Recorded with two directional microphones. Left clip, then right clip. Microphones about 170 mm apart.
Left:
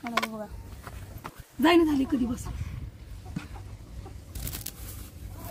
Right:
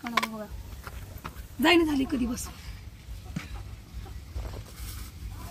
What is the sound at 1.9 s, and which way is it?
Speech, 15° right (ahead or behind).